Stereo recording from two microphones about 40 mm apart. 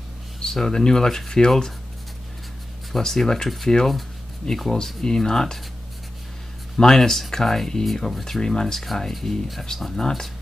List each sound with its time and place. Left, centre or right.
0.4 s speech: centre
2.9 s speech: centre
5.0 s speech: centre
6.8 s speech: centre